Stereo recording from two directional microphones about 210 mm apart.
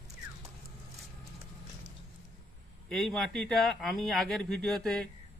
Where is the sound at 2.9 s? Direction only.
Centre (ahead or behind).